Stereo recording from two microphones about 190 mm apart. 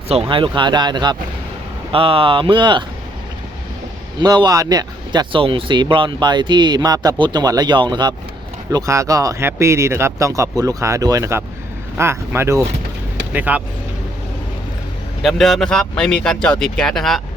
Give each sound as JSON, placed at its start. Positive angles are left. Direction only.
{"t": 0.1, "sound": "speech", "side_deg": -30}
{"t": 4.2, "sound": "speech", "side_deg": -20}
{"t": 15.2, "sound": "speech", "side_deg": 0}